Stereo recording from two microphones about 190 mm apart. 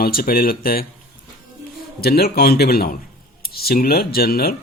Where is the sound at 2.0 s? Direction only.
55° left (ahead or behind).